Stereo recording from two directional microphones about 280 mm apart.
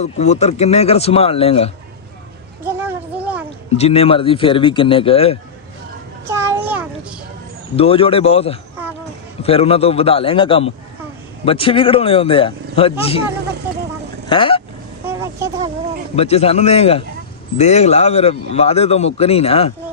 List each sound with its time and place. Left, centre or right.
0.0 s speech: left
2.6 s a sound: centre
3.8 s speech: left
6.2 s a sound: centre
7.8 s speech: centre
14.3 s speech: centre
15.0 s vehicle: centre
16.1 s speech: left